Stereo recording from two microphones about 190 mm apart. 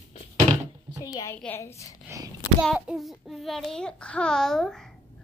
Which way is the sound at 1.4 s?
15° left (ahead or behind).